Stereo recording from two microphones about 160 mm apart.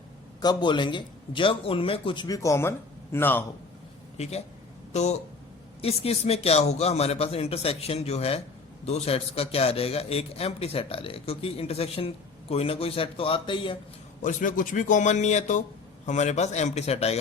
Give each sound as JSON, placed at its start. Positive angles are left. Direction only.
{"t": 0.4, "sound": "a man's voice", "side_deg": 30}
{"t": 4.2, "sound": "a man's voice", "side_deg": 40}
{"t": 14.2, "sound": "a man's voice", "side_deg": 55}